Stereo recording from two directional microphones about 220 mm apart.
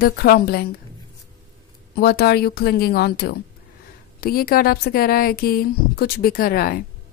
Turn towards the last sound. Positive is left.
turn(degrees=45)  # may be behind; listen again after turning